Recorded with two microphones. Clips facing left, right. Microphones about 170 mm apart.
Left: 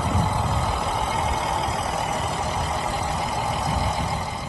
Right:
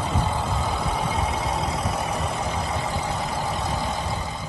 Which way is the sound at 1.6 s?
30° left (ahead or behind).